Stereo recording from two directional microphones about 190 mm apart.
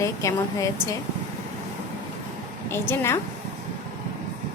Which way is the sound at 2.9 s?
15° left (ahead or behind).